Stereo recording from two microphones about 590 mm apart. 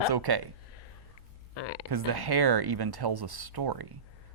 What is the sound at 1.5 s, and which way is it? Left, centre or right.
Speech, left.